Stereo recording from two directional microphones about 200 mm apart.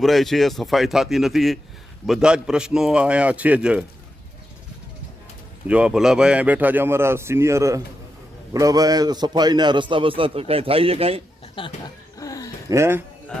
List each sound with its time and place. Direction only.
0.0 s a man's voice: centre (ahead or behind)
5.6 s a man's voice: 5° right (ahead or behind); by 11.2 s 30° right (ahead or behind)
11.6 s speech: 25° left (ahead or behind)
12.1 s dog: 15° left (ahead or behind)
12.7 s a man's voice: 15° right (ahead or behind)